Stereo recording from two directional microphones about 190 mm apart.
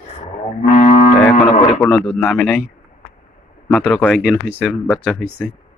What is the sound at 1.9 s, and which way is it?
Speech, centre (ahead or behind).